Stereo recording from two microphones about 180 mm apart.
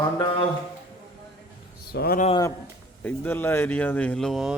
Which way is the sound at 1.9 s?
55° left (ahead or behind).